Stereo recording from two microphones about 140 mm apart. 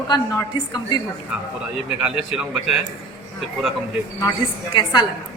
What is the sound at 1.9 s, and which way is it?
Speech, 10° right (ahead or behind).